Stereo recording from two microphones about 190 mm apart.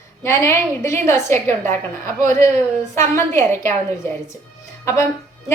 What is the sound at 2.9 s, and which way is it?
A woman's voice, 15° left (ahead or behind).